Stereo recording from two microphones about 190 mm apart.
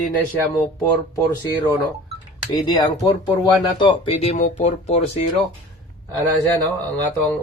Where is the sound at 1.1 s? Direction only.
20° left (ahead or behind).